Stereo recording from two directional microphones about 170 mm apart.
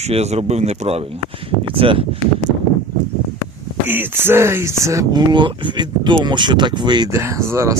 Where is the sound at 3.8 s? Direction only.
10° right (ahead or behind).